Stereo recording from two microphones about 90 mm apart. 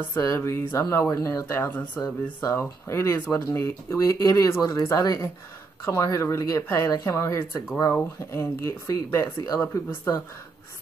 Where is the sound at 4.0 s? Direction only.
40° left (ahead or behind).